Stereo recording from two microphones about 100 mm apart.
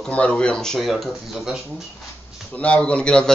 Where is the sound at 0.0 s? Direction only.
10° left (ahead or behind).